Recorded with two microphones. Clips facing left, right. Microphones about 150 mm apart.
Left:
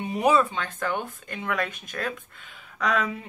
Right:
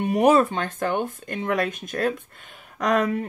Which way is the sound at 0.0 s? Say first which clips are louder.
Right 4 dB; 50° right (ahead or behind).